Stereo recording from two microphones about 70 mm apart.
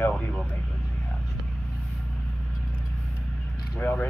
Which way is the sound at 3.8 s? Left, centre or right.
Left.